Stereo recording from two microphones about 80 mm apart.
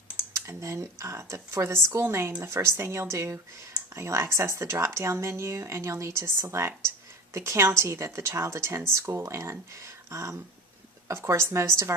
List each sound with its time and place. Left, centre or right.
0.3 s speech: right